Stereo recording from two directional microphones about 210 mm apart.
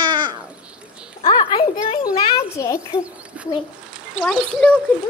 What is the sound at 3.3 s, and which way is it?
A child's voice, 5° right (ahead or behind).